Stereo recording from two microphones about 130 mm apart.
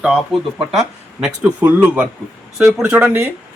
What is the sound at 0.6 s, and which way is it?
Speech, 5° right (ahead or behind).